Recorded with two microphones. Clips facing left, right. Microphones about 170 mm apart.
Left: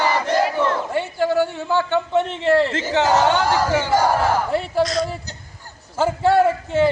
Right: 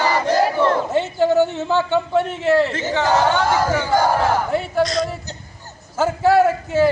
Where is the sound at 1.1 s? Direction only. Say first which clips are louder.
Right 3 dB; 20° right (ahead or behind).